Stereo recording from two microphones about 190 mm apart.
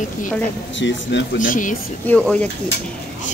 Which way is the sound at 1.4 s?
45° left (ahead or behind).